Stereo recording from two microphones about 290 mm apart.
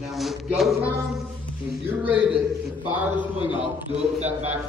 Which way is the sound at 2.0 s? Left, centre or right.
Centre.